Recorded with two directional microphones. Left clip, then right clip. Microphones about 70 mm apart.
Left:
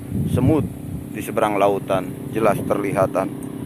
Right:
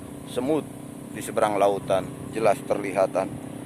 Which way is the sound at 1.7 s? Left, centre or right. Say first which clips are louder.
Left 3 dB; centre.